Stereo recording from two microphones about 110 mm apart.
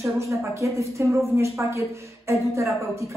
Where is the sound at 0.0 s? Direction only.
25° right (ahead or behind).